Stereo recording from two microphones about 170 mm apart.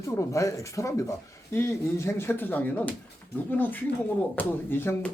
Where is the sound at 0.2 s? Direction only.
15° left (ahead or behind).